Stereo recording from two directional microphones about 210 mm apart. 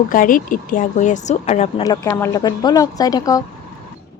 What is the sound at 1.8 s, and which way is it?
Speech, 15° left (ahead or behind).